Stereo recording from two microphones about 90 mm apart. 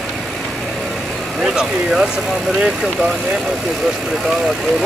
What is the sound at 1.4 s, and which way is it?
Speech, 5° right (ahead or behind).